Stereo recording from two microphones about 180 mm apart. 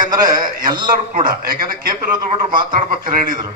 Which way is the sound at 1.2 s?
50° right (ahead or behind).